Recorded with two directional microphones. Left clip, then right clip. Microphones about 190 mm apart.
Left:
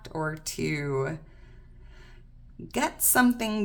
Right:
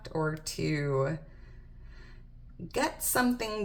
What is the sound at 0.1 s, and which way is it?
A woman's voice, 30° left (ahead or behind).